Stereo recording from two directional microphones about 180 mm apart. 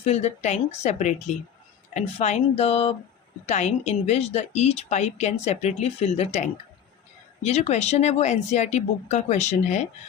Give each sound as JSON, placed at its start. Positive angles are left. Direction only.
{"t": 0.0, "sound": "speech", "side_deg": 35}